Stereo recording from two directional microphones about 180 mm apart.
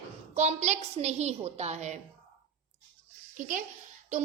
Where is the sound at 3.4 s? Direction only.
45° right (ahead or behind).